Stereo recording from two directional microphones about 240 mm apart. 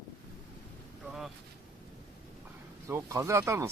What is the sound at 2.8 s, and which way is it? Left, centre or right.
Speech, centre.